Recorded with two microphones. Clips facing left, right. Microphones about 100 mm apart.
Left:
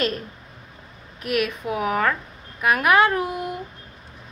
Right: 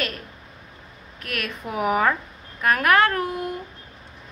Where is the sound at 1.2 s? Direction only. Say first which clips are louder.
Left 8 dB; 10° left (ahead or behind).